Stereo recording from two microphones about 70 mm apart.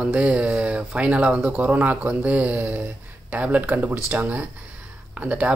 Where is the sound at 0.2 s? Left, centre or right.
Centre.